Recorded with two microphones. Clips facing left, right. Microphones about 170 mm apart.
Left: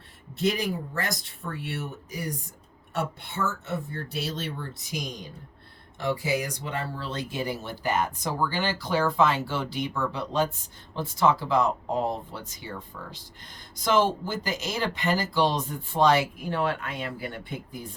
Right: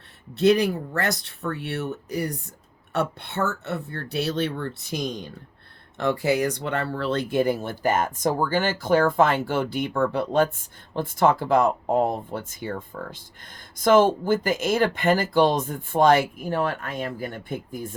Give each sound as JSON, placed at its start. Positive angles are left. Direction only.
{"t": 0.3, "sound": "speech", "side_deg": -65}